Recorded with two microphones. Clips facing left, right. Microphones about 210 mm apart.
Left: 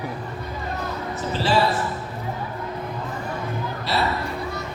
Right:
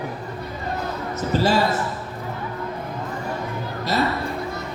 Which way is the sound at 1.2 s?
45° right (ahead or behind).